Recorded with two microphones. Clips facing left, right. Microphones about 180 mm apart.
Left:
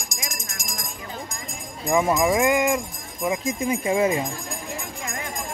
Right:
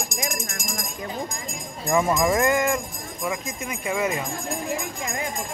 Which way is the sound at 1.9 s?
15° left (ahead or behind).